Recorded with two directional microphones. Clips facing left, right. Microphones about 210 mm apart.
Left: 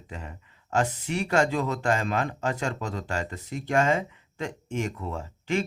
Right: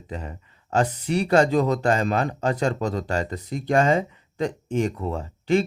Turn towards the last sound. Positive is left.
turn(degrees=-35)  # may be behind; listen again after turning